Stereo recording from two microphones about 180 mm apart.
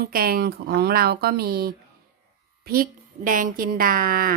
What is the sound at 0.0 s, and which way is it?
Speech, 55° right (ahead or behind).